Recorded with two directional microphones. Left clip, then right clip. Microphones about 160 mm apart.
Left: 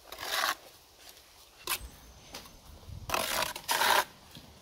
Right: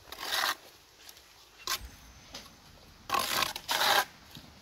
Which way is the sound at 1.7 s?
20° left (ahead or behind).